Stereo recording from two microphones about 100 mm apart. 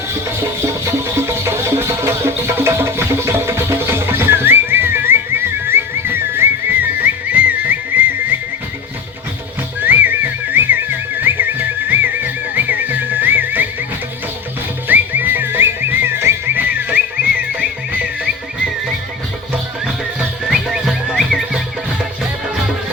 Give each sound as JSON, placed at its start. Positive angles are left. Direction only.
{"t": 0.6, "sound": "music", "side_deg": -30}
{"t": 9.8, "sound": "music", "side_deg": -20}
{"t": 14.8, "sound": "music", "side_deg": -20}
{"t": 19.8, "sound": "music", "side_deg": -5}